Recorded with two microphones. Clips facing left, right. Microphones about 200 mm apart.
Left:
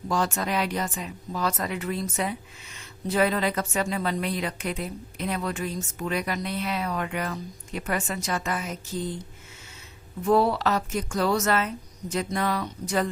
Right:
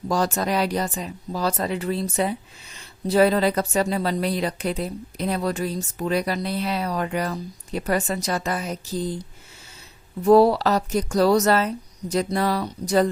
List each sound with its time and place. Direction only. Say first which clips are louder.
0.1 s speech: right 4 dB; 40° right (ahead or behind)
10.2 s speech: right 6 dB; 35° right (ahead or behind)